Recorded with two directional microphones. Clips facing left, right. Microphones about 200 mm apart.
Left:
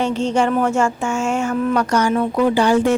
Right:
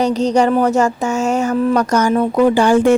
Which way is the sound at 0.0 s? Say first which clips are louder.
Right 4 dB; 40° right (ahead or behind).